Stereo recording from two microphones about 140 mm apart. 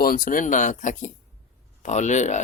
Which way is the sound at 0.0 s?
80° left.